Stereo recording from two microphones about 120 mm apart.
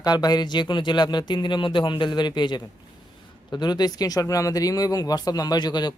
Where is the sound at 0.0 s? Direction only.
35° left (ahead or behind).